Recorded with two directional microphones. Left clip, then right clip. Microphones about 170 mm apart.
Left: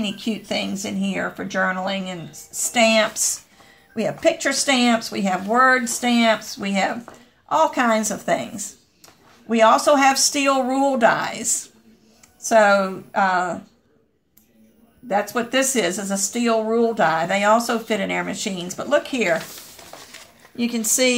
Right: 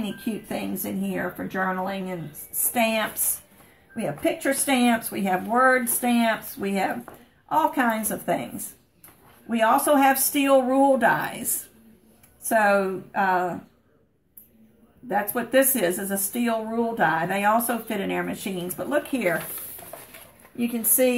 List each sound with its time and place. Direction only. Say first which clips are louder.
0.2 s speech: left 6 dB; 35° left (ahead or behind)
2.7 s speech: left 7 dB; 40° left (ahead or behind)
12.4 s speech: left 5 dB; 40° left (ahead or behind)
15.0 s speech: left 4 dB; 40° left (ahead or behind)
19.9 s a sound: left 1 dB; 10° left (ahead or behind)
20.5 s speech: left 4 dB; 45° left (ahead or behind)